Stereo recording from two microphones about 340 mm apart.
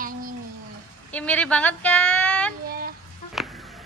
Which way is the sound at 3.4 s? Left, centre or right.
Centre.